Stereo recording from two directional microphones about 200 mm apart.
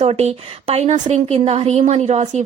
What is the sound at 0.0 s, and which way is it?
Speech, 30° right (ahead or behind).